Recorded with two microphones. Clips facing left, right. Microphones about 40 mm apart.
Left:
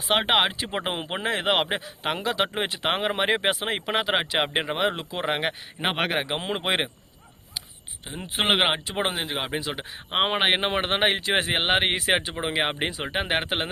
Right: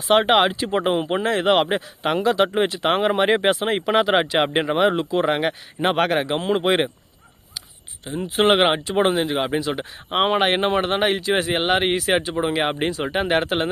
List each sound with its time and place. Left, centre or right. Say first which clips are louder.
0.1 s speech: right 6 dB; centre
8.4 s speech: right 5 dB; centre
10.8 s speech: right 3 dB; left